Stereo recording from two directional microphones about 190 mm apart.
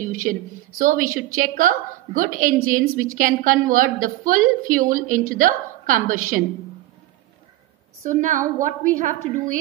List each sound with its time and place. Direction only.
0.0 s a woman's voice: 45° right (ahead or behind)
8.0 s a woman's voice: 40° right (ahead or behind)